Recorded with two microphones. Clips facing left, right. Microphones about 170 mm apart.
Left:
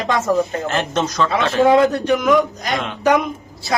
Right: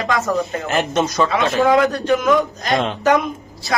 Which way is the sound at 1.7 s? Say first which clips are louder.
Left 1 dB; 25° left (ahead or behind).